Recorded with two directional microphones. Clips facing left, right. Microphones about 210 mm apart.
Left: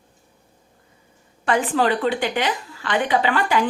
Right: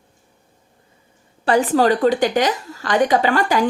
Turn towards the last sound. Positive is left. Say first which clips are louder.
# right 3 dB
turn(degrees=-40)  # may be behind; listen again after turning